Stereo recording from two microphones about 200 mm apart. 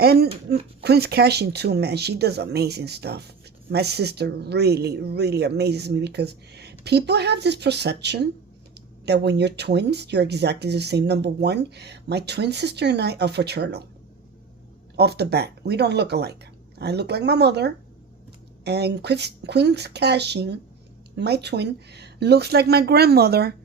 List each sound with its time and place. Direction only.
0.0 s speech: 50° right (ahead or behind)
14.9 s speech: 55° right (ahead or behind)